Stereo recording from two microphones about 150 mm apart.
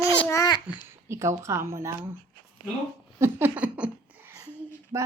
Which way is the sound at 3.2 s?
15° right (ahead or behind).